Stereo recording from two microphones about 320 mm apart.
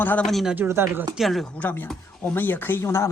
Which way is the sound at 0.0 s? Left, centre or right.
Centre.